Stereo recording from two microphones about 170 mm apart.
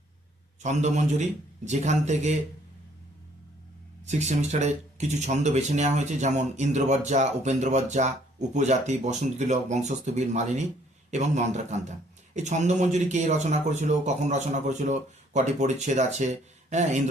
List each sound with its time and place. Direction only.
0.6 s speech: 45° right (ahead or behind)
4.0 s speech: 45° right (ahead or behind)